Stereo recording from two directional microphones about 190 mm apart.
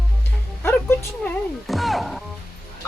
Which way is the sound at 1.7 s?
Centre (ahead or behind).